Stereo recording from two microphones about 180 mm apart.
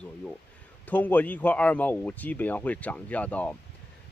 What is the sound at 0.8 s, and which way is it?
Speech, 10° left (ahead or behind).